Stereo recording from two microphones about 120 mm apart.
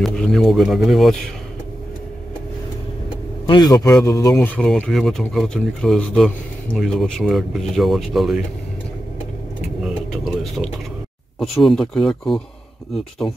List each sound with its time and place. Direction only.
0.0 s speech: 5° left (ahead or behind)
3.4 s a man's voice: 35° left (ahead or behind)
4.4 s speech: 10° left (ahead or behind)
9.8 s a sound: centre (ahead or behind)
11.5 s speech: centre (ahead or behind)